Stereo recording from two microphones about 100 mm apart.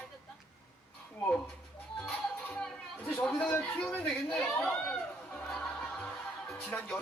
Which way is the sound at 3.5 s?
15° left (ahead or behind).